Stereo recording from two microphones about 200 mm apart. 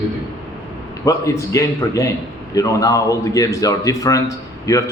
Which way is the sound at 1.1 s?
15° left (ahead or behind).